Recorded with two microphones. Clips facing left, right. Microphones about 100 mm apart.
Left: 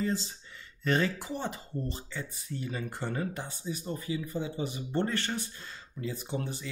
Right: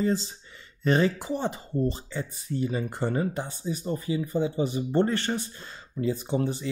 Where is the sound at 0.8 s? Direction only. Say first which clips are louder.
Right 5 dB; 25° right (ahead or behind).